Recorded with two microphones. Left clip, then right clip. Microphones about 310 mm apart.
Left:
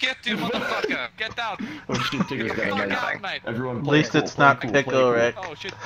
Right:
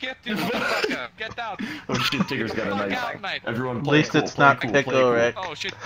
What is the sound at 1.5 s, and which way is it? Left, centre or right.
Speech, centre.